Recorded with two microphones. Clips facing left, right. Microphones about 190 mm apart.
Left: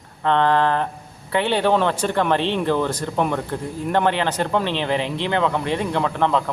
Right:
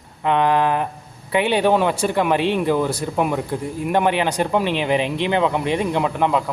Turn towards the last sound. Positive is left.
turn(degrees=-10)  # may be behind; listen again after turning